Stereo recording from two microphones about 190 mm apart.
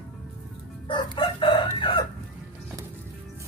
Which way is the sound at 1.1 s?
25° left (ahead or behind).